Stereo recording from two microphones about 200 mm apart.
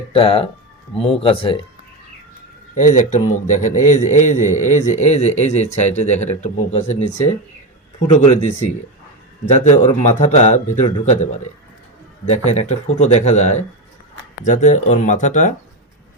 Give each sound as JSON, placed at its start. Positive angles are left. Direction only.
{"t": 0.1, "sound": "a man's voice", "side_deg": 30}
{"t": 2.7, "sound": "a man's voice", "side_deg": 40}
{"t": 8.1, "sound": "a man's voice", "side_deg": 35}
{"t": 12.5, "sound": "a man's voice", "side_deg": 35}